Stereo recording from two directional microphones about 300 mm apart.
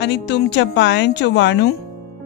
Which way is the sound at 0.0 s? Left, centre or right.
Left.